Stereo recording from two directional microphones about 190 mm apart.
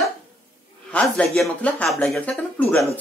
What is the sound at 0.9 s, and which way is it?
Speech, 5° left (ahead or behind).